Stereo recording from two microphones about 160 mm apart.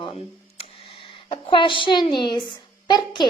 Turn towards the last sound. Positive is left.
turn(degrees=30)  # may be behind; listen again after turning